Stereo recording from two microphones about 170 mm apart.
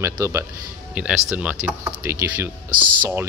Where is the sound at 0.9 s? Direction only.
5° right (ahead or behind).